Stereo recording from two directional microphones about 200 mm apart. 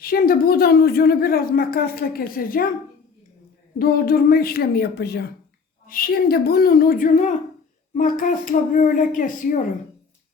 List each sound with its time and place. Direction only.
0.0 s a woman's voice: 45° left (ahead or behind)
3.8 s a woman's voice: 50° left (ahead or behind)